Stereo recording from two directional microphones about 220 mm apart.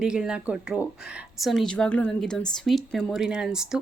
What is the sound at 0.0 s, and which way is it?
Speech, 5° right (ahead or behind).